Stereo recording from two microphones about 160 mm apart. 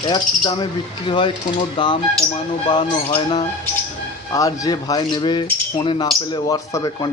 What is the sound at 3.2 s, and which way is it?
Speech, 30° left (ahead or behind).